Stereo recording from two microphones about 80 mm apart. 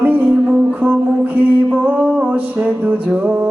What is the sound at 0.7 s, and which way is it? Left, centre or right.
Music, right.